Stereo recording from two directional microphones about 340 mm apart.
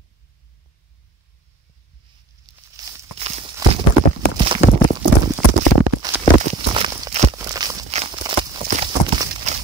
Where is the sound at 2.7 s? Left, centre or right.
Centre.